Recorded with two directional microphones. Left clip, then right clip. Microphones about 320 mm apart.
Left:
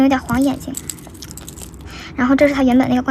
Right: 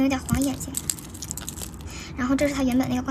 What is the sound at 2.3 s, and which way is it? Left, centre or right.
Speech, centre.